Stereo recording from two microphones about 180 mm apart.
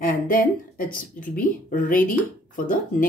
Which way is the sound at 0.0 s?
50° left (ahead or behind).